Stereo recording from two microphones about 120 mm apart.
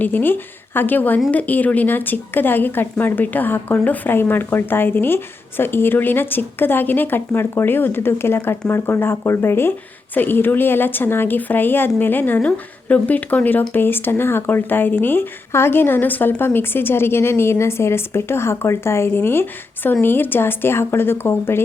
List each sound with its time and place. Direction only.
0.0 s speech: 15° left (ahead or behind)